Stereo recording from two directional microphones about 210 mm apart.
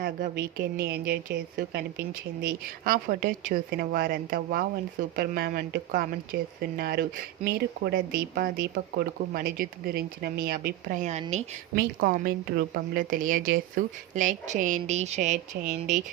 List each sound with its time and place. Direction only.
0.0 s a woman's voice: 45° right (ahead or behind)